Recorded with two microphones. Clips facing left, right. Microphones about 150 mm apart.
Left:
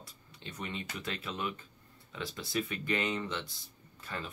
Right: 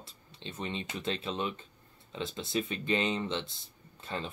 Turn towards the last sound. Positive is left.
turn(degrees=-25)  # may be behind; listen again after turning